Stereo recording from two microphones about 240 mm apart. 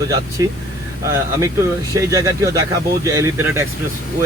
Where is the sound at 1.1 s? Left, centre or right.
Centre.